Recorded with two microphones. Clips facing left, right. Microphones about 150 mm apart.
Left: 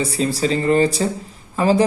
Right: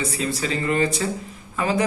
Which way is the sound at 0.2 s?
30° left (ahead or behind).